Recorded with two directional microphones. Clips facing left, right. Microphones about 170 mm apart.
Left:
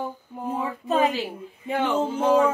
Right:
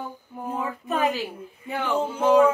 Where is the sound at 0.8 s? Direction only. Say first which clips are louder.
Left 3 dB; 25° left (ahead or behind).